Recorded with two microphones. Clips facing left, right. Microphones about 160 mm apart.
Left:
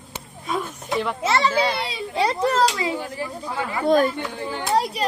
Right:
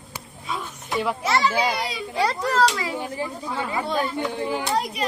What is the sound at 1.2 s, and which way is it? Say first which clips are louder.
A child's voice: left 2 dB; 25° left (ahead or behind).